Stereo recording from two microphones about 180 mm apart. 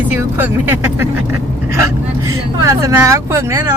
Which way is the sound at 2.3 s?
15° right (ahead or behind).